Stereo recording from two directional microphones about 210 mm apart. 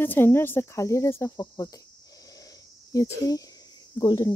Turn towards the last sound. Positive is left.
turn(degrees=20)  # may be behind; listen again after turning